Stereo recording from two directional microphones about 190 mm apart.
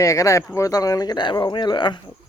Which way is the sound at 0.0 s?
15° left (ahead or behind).